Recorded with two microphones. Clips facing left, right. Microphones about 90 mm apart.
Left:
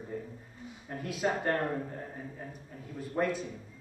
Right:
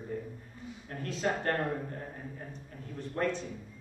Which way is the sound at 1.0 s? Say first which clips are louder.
Left 1 dB; 10° left (ahead or behind).